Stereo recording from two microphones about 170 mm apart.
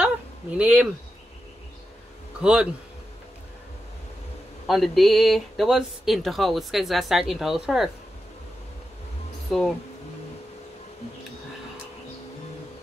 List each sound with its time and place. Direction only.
0.6 s speech: 10° right (ahead or behind)
2.4 s speech: 5° right (ahead or behind)
4.6 s speech: centre (ahead or behind)
9.5 s speech: centre (ahead or behind)